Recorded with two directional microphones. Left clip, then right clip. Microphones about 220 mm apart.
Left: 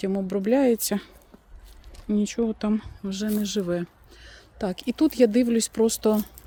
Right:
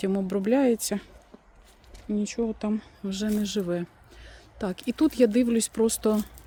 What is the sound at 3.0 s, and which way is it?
Speech, 5° left (ahead or behind).